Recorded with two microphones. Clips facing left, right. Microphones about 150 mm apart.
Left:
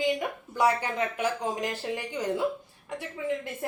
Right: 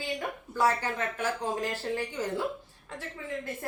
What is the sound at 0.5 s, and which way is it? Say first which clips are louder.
A woman's voice: left 2 dB; 15° left (ahead or behind).